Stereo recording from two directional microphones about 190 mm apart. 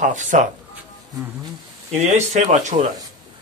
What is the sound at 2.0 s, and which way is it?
Speech, 40° right (ahead or behind).